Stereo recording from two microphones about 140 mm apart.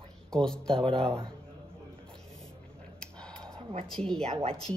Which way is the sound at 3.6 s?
40° right (ahead or behind).